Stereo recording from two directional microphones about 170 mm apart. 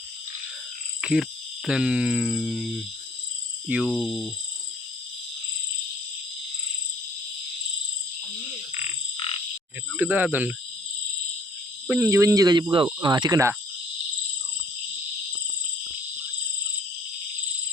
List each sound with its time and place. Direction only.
1.0 s speech: 5° right (ahead or behind)
3.8 s speech: 5° left (ahead or behind)
10.0 s speech: 10° right (ahead or behind)
11.9 s speech: 15° right (ahead or behind)